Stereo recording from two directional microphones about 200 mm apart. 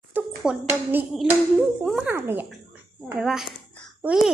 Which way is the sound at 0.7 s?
10° right (ahead or behind).